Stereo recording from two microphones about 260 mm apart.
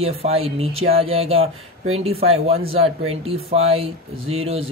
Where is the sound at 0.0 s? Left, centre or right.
Right.